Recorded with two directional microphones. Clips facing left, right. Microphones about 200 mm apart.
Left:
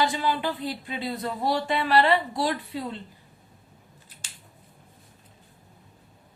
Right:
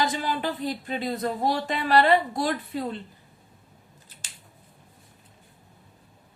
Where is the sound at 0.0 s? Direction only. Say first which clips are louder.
Left 1 dB; 45° right (ahead or behind).